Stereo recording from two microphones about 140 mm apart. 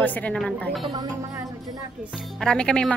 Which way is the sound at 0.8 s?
30° right (ahead or behind).